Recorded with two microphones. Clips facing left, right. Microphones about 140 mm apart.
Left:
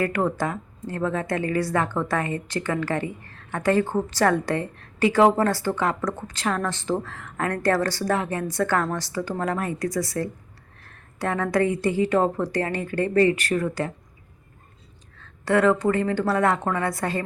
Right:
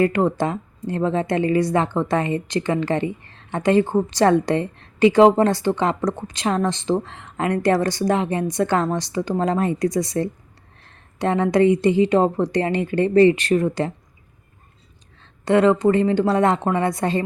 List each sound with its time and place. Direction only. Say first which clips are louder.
0.0 s a woman's voice: right 5 dB; 25° right (ahead or behind)
10.8 s a sound: right 5 dB; 20° right (ahead or behind)
11.4 s a woman's voice: right 6 dB; 20° right (ahead or behind)
15.2 s a woman's voice: right 4 dB; 20° right (ahead or behind)